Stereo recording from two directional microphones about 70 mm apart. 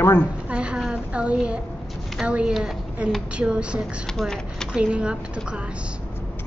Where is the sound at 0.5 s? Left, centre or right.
Centre.